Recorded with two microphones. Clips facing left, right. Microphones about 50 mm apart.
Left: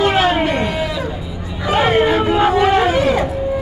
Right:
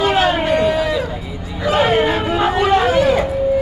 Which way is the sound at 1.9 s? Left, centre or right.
Centre.